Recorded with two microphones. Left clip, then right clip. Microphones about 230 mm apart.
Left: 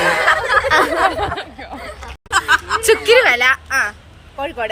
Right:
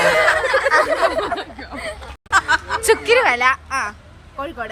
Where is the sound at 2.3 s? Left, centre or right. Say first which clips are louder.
Left 2 dB; centre.